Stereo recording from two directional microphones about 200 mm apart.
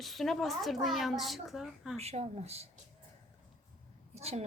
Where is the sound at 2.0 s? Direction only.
30° right (ahead or behind).